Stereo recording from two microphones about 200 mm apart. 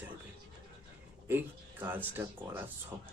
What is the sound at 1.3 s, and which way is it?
Speech, 10° right (ahead or behind).